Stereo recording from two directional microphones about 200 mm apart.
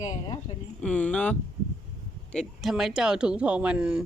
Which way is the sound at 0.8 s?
5° left (ahead or behind).